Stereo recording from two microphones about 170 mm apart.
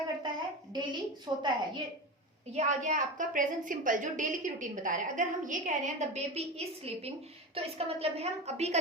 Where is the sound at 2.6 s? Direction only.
45° right (ahead or behind).